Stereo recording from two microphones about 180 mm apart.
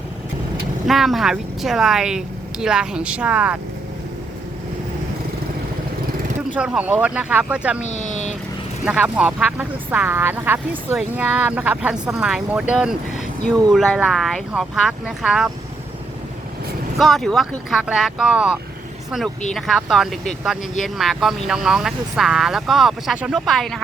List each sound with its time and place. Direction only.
0.9 s speech: centre (ahead or behind)
6.6 s speech: 5° right (ahead or behind)
7.8 s a sound: 40° left (ahead or behind)
8.8 s speech: 5° right (ahead or behind)
17.0 s speech: centre (ahead or behind)